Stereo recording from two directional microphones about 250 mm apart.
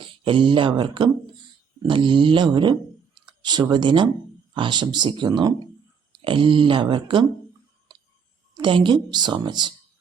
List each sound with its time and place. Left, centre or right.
0.0 s a woman's voice: centre
8.5 s a woman's voice: centre